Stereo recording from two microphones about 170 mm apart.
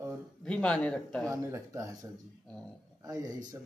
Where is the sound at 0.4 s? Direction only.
5° left (ahead or behind).